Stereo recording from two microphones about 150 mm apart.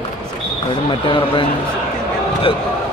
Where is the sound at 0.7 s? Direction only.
35° left (ahead or behind).